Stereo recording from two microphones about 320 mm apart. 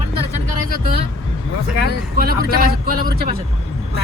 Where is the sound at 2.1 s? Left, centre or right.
Right.